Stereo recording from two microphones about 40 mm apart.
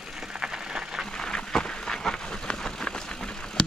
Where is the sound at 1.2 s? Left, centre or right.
Centre.